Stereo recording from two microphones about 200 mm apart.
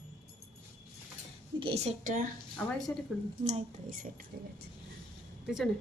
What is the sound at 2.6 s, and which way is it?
Speech, 5° left (ahead or behind).